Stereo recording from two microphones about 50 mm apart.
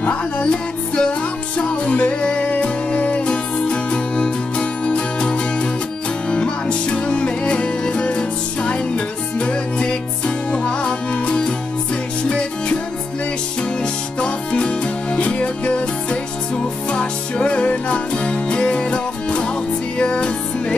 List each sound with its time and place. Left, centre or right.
0.0 s music: left
14.2 s music: left